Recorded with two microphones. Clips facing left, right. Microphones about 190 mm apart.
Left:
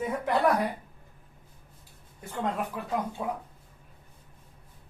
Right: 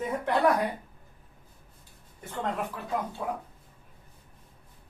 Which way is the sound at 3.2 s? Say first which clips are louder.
Left 1 dB; 20° left (ahead or behind).